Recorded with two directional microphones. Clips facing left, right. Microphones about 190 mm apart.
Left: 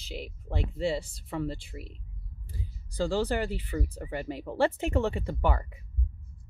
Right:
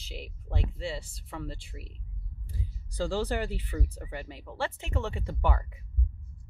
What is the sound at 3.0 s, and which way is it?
Speech, 40° left (ahead or behind).